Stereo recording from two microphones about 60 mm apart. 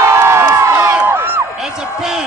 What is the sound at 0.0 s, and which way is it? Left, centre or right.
Crowd, right.